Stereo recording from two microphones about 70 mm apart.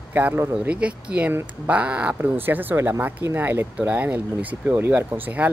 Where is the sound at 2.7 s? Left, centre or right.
Right.